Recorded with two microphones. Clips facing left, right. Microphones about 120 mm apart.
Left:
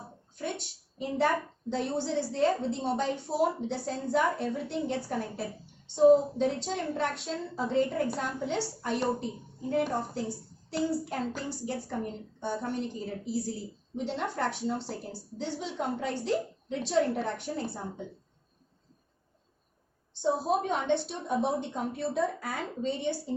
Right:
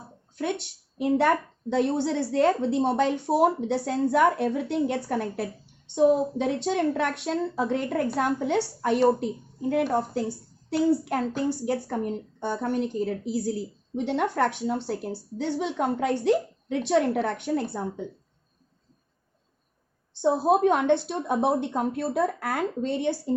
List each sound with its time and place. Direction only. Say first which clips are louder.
1.7 s a woman's voice: right 6 dB; 75° right (ahead or behind)
9.6 s a woman's voice: right 5 dB; 75° right (ahead or behind)
20.2 s a woman's voice: right 7 dB; 75° right (ahead or behind); by 23.3 s 60° right (ahead or behind)